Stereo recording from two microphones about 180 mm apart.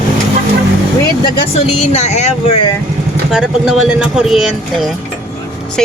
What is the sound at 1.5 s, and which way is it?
Speech, 40° left (ahead or behind).